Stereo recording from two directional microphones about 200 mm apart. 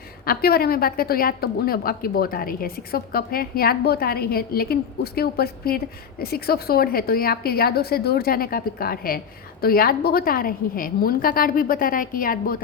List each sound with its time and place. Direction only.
0.3 s a woman's voice: 50° left (ahead or behind)